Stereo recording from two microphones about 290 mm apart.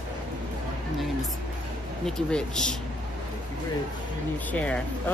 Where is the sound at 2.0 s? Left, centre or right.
Centre.